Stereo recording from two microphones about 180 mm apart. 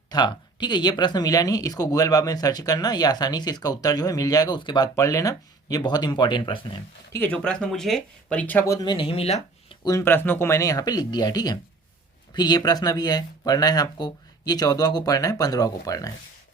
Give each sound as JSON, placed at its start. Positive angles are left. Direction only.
{"t": 0.1, "sound": "speech", "side_deg": 25}
{"t": 7.1, "sound": "speech", "side_deg": 10}
{"t": 9.8, "sound": "speech", "side_deg": 15}